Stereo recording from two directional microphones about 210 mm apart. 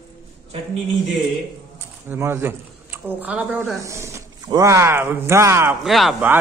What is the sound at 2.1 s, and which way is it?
Speech, 10° right (ahead or behind).